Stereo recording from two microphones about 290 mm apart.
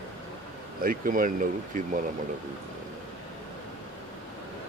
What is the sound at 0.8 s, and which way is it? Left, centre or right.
Speech, right.